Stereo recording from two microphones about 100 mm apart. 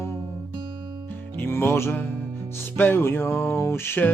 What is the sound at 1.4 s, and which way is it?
Music, 25° left (ahead or behind).